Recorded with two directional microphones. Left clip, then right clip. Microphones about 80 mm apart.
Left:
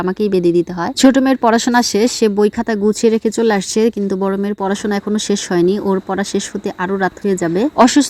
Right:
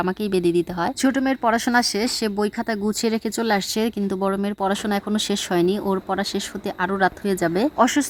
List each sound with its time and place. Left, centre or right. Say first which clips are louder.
0.2 s speech: left 10 dB; left
1.0 s speech: left 10 dB; left
3.0 s speech: left 10 dB; left
7.8 s speech: left 9 dB; left